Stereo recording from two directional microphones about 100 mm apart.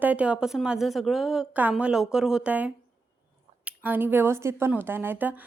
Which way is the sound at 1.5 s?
15° right (ahead or behind).